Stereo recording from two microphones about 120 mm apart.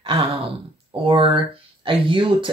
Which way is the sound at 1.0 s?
45° right (ahead or behind).